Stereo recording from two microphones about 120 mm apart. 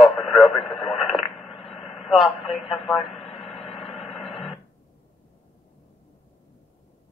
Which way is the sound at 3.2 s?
55° left (ahead or behind).